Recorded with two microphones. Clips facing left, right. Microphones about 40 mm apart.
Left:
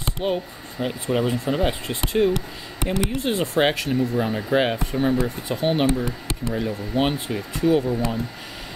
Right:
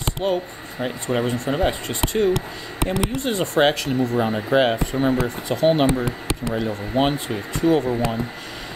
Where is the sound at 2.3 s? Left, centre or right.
Right.